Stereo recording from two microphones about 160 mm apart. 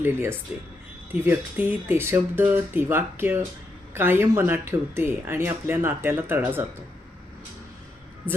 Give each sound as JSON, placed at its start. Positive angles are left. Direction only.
{"t": 0.0, "sound": "speech", "side_deg": -15}